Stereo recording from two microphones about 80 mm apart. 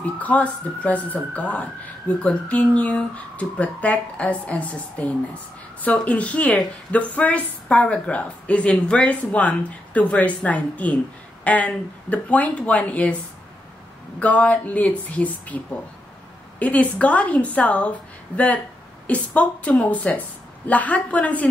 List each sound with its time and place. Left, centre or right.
0.0 s speech: centre
14.2 s speech: centre